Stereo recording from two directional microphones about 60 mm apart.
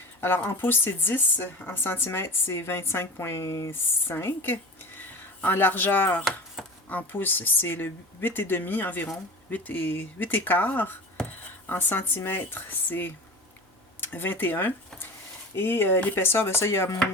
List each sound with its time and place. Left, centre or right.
0.2 s speech: left
3.7 s speech: left